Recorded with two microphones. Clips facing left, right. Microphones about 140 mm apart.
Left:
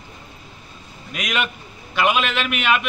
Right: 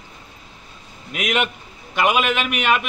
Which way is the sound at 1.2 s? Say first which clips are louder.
Right 3 dB; 55° right (ahead or behind).